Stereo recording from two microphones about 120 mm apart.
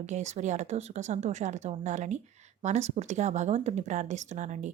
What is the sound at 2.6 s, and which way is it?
Speech, 70° right (ahead or behind).